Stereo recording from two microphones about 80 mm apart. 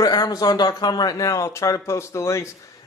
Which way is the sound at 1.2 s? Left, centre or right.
Left.